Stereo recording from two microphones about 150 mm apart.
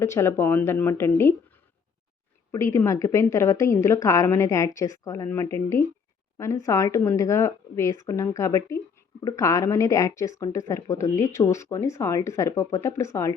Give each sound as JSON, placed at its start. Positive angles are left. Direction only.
{"t": 0.0, "sound": "speech", "side_deg": 20}
{"t": 2.5, "sound": "a woman's voice", "side_deg": 20}